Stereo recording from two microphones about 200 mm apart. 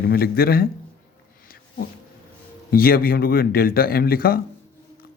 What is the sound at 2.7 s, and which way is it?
Speech, 45° left (ahead or behind).